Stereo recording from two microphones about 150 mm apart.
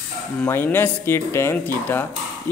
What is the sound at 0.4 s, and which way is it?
A man's voice, 15° left (ahead or behind).